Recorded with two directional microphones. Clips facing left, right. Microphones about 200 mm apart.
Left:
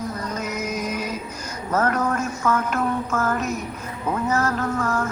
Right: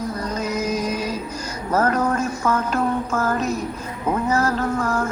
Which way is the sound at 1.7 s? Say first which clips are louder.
Right 2 dB; 30° right (ahead or behind).